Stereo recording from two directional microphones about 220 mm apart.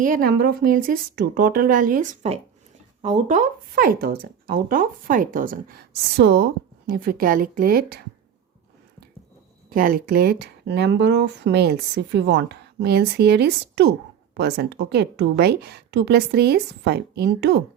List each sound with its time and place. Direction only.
0.0 s speech: 40° right (ahead or behind)
9.6 s speech: 40° right (ahead or behind)